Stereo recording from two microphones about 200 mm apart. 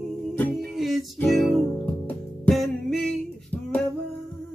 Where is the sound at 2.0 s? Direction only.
Centre (ahead or behind).